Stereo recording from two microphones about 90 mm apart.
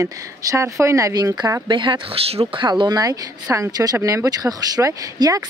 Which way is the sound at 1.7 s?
60° right (ahead or behind).